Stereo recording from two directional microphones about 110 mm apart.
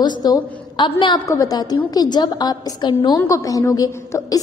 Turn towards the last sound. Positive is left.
turn(degrees=35)  # may be behind; listen again after turning